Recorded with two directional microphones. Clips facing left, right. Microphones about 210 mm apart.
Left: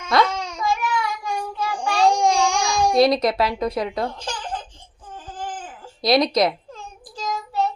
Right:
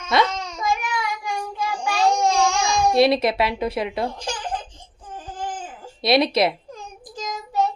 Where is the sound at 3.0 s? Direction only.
25° right (ahead or behind).